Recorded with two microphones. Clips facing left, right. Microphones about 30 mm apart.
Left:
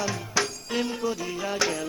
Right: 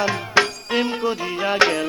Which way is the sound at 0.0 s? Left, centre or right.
Right.